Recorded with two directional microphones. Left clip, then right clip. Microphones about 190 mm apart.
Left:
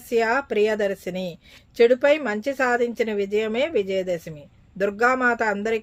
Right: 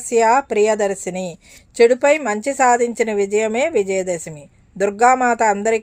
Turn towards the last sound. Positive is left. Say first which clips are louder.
# right 7 dB
turn(degrees=-25)  # may be behind; listen again after turning